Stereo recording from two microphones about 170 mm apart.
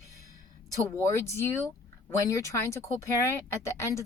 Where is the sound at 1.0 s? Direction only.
15° left (ahead or behind).